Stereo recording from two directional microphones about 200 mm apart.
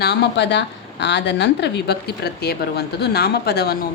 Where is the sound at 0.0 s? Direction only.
55° left (ahead or behind).